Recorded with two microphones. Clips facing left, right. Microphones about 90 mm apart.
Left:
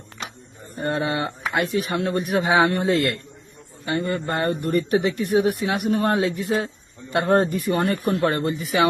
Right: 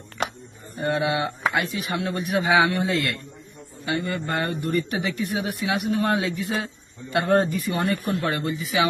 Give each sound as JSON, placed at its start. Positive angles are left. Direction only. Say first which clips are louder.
{"t": 0.8, "sound": "a man's voice", "louder": "even", "side_deg": 40}
{"t": 3.8, "sound": "a man's voice", "louder": "left 2 dB", "side_deg": 35}
{"t": 6.2, "sound": "a man's voice", "louder": "left 4 dB", "side_deg": 30}